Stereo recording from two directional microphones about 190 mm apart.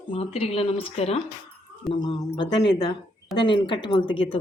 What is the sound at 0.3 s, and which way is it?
Speech, 30° left (ahead or behind).